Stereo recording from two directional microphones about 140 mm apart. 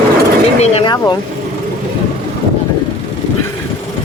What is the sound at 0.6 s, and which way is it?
Speech, 45° left (ahead or behind).